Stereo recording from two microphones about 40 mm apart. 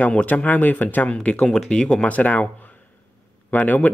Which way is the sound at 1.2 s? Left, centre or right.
Left.